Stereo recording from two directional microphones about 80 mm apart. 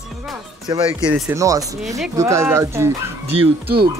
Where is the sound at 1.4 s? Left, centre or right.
Right.